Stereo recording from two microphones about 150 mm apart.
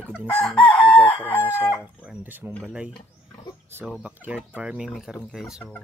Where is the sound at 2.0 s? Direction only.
10° right (ahead or behind).